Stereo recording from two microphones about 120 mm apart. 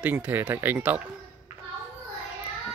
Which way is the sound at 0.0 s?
15° right (ahead or behind).